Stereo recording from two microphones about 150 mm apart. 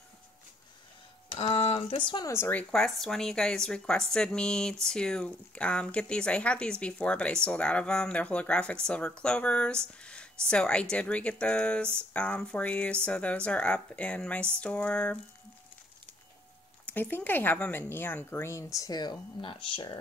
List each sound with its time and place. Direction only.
1.4 s speech: 45° left (ahead or behind)
2.3 s speech: 15° left (ahead or behind)
2.7 s a woman's voice: centre (ahead or behind)
16.8 s speech: 10° left (ahead or behind); by 20.0 s 35° left (ahead or behind)